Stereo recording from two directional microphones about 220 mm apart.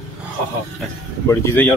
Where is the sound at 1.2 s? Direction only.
10° left (ahead or behind).